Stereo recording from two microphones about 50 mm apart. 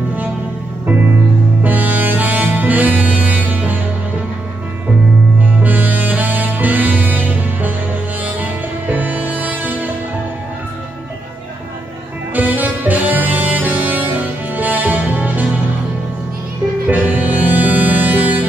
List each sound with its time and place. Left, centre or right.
1.6 s music: right
5.6 s saxophone: right
8.2 s music: right
12.4 s music: right
16.8 s music: right